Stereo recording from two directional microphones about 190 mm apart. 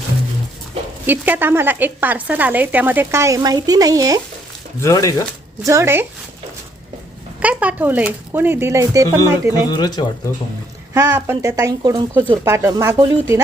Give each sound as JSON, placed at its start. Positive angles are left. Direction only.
{"t": 1.0, "sound": "speech", "side_deg": -10}
{"t": 4.8, "sound": "speech", "side_deg": 15}
{"t": 5.6, "sound": "speech", "side_deg": -15}
{"t": 7.4, "sound": "speech", "side_deg": -5}
{"t": 9.6, "sound": "speech", "side_deg": 20}
{"t": 10.9, "sound": "speech", "side_deg": -20}